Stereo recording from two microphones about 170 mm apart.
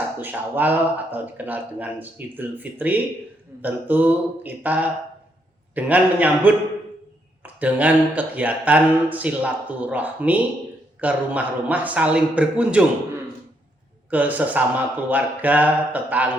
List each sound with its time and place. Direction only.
0.2 s speech: 10° right (ahead or behind)
14.1 s speech: 10° right (ahead or behind)